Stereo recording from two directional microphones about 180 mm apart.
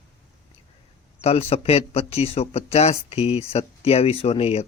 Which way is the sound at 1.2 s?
35° left (ahead or behind).